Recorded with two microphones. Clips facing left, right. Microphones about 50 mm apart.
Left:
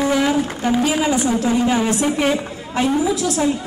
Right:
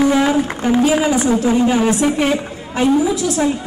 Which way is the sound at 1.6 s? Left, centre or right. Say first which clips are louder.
Right 3 dB; centre.